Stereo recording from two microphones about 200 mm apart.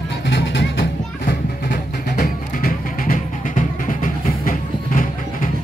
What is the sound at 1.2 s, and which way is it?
Music, 45° left (ahead or behind).